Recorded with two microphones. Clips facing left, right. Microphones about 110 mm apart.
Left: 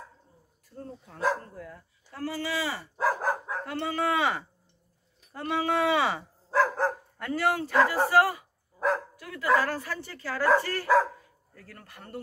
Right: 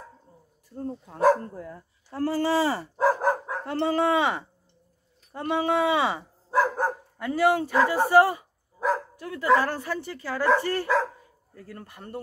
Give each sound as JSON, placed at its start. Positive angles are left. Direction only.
{"t": 0.7, "sound": "speech", "side_deg": -30}
{"t": 3.1, "sound": "dog", "side_deg": -20}
{"t": 5.3, "sound": "speech", "side_deg": -20}
{"t": 8.7, "sound": "dog", "side_deg": 0}
{"t": 9.2, "sound": "speech", "side_deg": -25}